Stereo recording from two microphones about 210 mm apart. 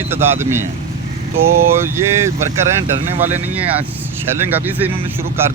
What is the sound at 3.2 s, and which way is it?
Speech, 10° right (ahead or behind).